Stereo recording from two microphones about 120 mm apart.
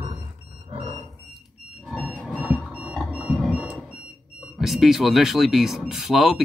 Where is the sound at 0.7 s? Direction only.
45° right (ahead or behind).